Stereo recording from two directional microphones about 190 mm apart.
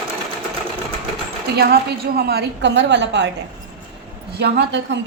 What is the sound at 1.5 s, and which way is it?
A woman's voice, 60° right (ahead or behind).